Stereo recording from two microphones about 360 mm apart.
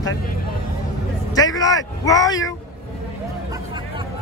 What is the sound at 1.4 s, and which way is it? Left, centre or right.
A man's voice, centre.